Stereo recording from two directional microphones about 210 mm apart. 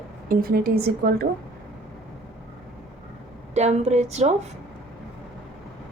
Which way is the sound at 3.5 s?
30° right (ahead or behind).